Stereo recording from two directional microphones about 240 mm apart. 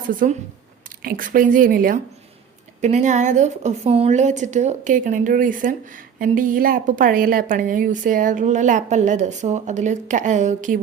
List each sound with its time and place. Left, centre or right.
0.1 s a woman's voice: right